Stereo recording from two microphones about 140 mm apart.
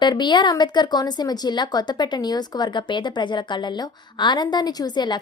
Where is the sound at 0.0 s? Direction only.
35° left (ahead or behind).